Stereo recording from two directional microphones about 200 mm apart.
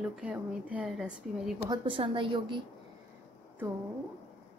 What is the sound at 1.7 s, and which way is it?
Speech, 25° right (ahead or behind).